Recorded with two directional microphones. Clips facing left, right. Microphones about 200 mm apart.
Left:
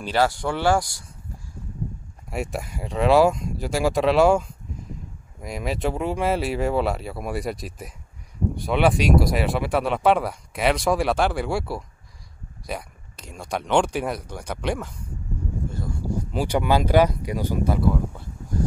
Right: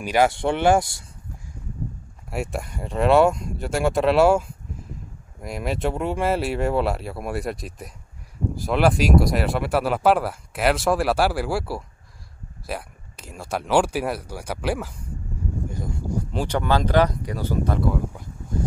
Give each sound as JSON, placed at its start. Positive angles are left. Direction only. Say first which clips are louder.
{"t": 0.0, "sound": "speech", "louder": "right 2 dB", "side_deg": -15}
{"t": 0.3, "sound": "speech", "louder": "right 3 dB", "side_deg": -25}
{"t": 2.3, "sound": "speech", "louder": "even", "side_deg": 0}
{"t": 15.7, "sound": "a sound", "louder": "even", "side_deg": -20}
{"t": 16.3, "sound": "speech", "louder": "left 2 dB", "side_deg": 10}